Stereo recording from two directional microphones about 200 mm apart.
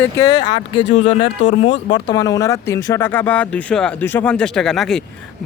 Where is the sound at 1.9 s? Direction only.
20° left (ahead or behind).